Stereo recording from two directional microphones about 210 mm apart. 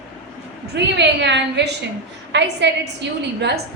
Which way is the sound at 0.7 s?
55° right (ahead or behind).